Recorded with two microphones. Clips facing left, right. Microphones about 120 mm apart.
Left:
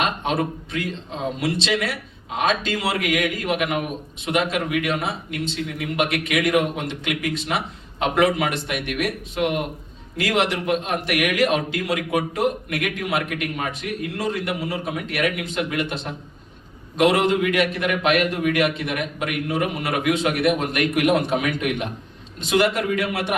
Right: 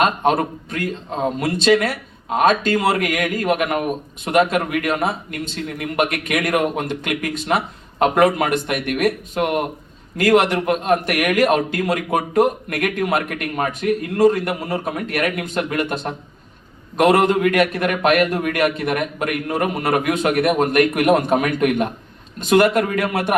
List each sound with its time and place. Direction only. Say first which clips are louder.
0.0 s a man's voice: right 5 dB; 50° right (ahead or behind)